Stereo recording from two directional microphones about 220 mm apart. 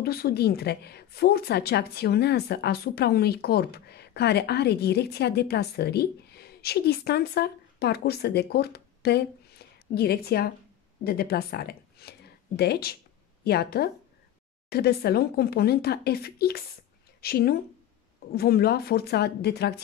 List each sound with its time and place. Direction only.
0.0 s a woman's voice: 45° left (ahead or behind)